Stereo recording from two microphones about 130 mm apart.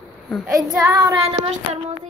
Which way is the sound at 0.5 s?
30° right (ahead or behind).